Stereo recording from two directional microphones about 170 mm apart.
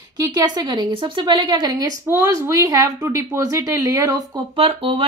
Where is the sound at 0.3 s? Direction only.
20° right (ahead or behind).